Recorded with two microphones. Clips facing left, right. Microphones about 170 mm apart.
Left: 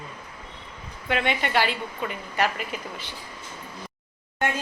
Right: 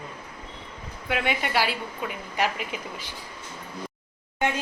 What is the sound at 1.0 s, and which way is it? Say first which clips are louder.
A woman's voice: left 1 dB; 10° right (ahead or behind).